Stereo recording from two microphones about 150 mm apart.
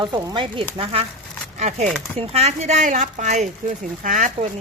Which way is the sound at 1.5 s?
50° right (ahead or behind).